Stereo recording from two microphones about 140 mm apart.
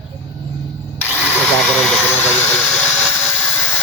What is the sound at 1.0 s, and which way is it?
Ratchet, 10° right (ahead or behind).